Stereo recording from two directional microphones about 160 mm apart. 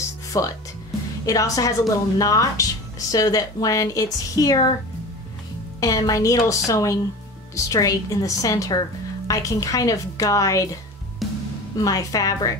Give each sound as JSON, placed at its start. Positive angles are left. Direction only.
{"t": 0.3, "sound": "a woman's voice", "side_deg": 20}
{"t": 5.8, "sound": "a woman's voice", "side_deg": 20}
{"t": 11.2, "sound": "music", "side_deg": 0}
{"t": 11.7, "sound": "a woman's voice", "side_deg": 20}